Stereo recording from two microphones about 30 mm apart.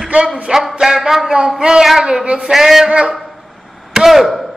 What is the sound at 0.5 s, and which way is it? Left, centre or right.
Speech, right.